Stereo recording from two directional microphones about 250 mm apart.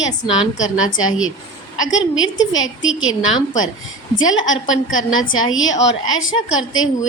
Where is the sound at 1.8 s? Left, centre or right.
Left.